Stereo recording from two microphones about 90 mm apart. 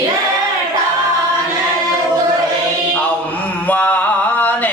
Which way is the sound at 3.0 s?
15° left (ahead or behind).